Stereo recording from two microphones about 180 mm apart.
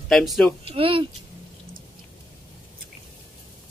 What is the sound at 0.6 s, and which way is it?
Speech, 30° right (ahead or behind).